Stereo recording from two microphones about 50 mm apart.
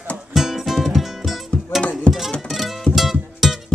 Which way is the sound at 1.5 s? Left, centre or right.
Centre.